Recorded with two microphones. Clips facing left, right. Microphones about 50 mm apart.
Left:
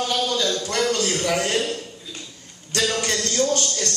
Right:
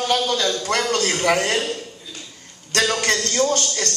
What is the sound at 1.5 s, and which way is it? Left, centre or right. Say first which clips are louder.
Speech: even; right.